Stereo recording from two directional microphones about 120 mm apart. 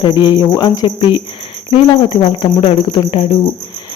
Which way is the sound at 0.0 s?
40° left (ahead or behind).